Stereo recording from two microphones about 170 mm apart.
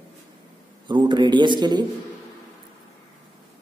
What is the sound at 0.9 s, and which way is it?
Speech, 25° right (ahead or behind).